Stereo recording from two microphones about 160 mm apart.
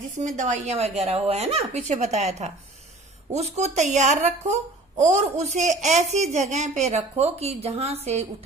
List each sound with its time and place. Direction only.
0.2 s speech: 50° right (ahead or behind)